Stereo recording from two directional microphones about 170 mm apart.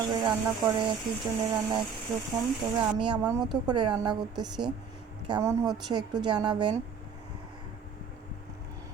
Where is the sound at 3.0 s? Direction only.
25° right (ahead or behind).